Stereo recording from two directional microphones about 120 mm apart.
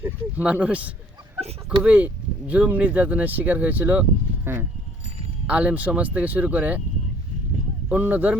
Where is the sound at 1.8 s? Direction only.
10° right (ahead or behind).